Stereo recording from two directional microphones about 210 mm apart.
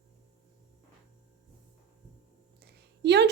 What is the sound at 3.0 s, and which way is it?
Speech, 55° right (ahead or behind).